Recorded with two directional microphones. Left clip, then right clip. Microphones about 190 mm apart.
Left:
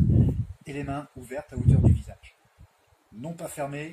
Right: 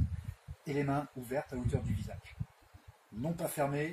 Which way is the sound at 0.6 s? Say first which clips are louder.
Even; 10° left (ahead or behind).